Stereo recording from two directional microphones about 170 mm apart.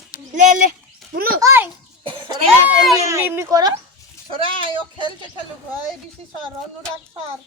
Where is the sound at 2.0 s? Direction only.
30° right (ahead or behind).